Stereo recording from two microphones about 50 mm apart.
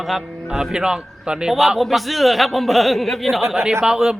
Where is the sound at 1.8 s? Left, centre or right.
Centre.